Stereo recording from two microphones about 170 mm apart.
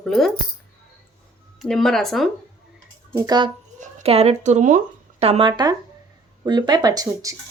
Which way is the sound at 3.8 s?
35° right (ahead or behind).